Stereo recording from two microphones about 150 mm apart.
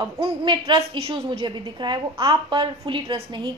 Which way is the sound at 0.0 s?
30° right (ahead or behind).